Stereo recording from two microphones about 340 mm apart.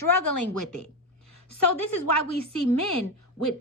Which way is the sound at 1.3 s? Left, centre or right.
Left.